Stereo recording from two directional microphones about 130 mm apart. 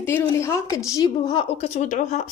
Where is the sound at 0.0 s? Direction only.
20° left (ahead or behind).